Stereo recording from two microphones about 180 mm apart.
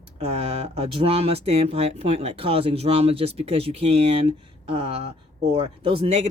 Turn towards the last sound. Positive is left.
turn(degrees=-35)  # may be behind; listen again after turning